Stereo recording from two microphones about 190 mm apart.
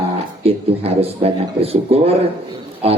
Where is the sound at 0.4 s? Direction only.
30° right (ahead or behind).